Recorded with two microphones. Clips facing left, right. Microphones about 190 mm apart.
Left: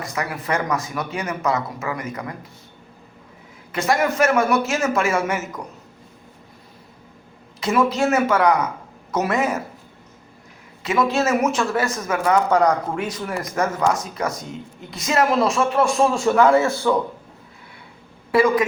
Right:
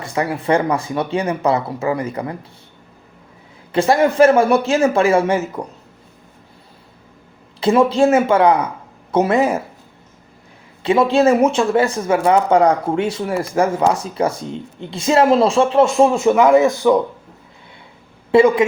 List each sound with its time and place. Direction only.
0.0 s speech: 30° right (ahead or behind)
3.7 s speech: 30° right (ahead or behind)
7.6 s speech: 30° right (ahead or behind)
10.8 s speech: 30° right (ahead or behind)
18.3 s a woman's voice: 25° right (ahead or behind)